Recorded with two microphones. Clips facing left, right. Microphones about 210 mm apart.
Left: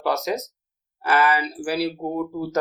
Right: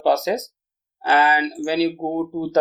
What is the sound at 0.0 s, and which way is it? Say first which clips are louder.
Speech: right 5 dB; 25° right (ahead or behind).